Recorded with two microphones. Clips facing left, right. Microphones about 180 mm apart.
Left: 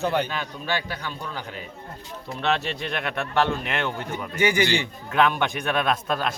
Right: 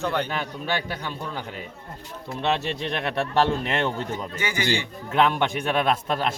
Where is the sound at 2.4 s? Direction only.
25° right (ahead or behind).